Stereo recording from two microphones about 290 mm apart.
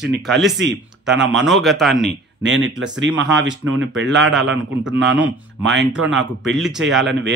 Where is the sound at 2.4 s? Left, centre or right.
Right.